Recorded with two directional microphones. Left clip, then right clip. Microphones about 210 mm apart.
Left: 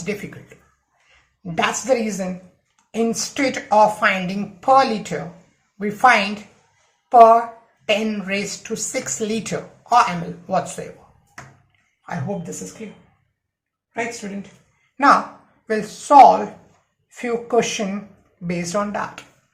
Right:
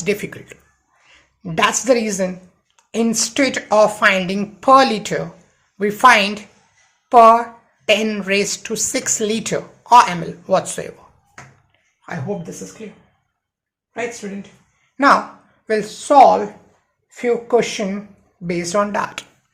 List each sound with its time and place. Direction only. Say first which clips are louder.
0.0 s a woman's voice: right 7 dB; 40° right (ahead or behind)
12.0 s speech: right 2 dB; 35° right (ahead or behind)
15.6 s speech: right 4 dB; 35° right (ahead or behind)